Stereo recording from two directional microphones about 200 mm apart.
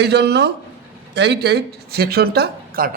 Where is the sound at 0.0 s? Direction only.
55° right (ahead or behind).